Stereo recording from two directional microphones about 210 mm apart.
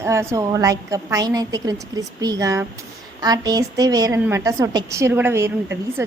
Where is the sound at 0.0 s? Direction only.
15° right (ahead or behind).